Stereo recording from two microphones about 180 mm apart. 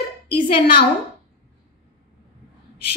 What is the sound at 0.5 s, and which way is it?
Speech, 60° left (ahead or behind).